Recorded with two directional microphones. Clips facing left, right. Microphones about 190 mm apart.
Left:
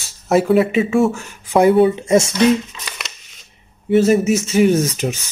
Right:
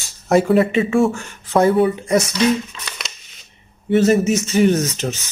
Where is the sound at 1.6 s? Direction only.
20° left (ahead or behind).